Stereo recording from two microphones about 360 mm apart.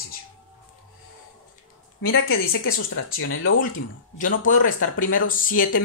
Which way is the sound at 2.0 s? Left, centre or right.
Left.